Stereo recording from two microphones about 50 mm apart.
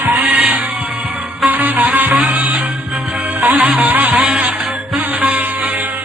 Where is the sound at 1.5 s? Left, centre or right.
Right.